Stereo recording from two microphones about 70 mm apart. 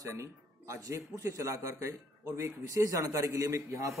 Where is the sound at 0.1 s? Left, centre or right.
Right.